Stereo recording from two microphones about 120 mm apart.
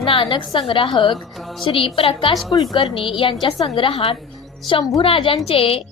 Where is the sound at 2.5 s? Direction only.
35° left (ahead or behind).